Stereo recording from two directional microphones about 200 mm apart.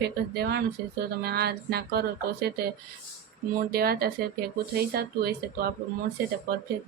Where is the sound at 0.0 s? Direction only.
55° right (ahead or behind).